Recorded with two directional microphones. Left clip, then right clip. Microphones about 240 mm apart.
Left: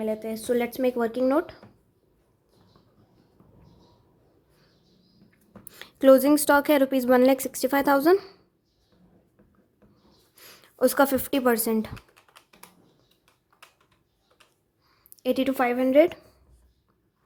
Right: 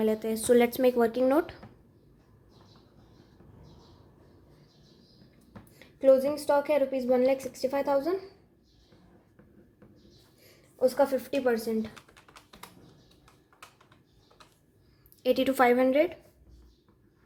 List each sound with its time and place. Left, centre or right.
0.0 s speech: centre
5.8 s a sound: left
6.4 s speech: left
10.4 s speech: left
15.2 s a woman's voice: centre